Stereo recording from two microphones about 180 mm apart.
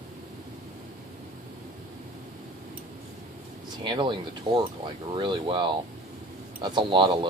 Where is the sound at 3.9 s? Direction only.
25° right (ahead or behind).